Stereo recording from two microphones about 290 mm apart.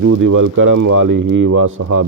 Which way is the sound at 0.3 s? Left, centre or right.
Right.